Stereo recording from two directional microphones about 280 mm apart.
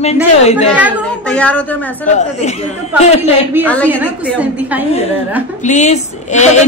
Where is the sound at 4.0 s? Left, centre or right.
Centre.